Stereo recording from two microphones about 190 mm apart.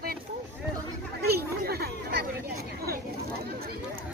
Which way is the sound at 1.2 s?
55° right (ahead or behind).